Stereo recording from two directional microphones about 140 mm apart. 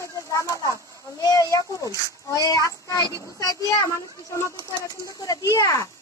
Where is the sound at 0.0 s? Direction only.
25° left (ahead or behind).